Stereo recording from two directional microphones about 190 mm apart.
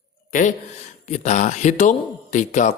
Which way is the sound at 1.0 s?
35° left (ahead or behind).